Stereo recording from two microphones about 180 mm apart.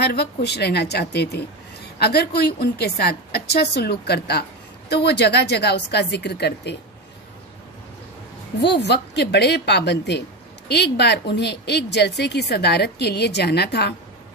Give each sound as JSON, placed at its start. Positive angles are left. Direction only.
{"t": 0.0, "sound": "a woman's voice", "side_deg": 65}
{"t": 8.5, "sound": "a woman's voice", "side_deg": 70}